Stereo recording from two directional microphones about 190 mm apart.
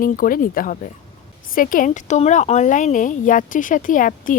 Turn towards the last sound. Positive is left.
turn(degrees=45)  # may be behind; listen again after turning